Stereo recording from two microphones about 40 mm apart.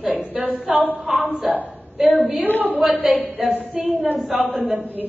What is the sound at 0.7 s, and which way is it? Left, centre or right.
A woman's voice, centre.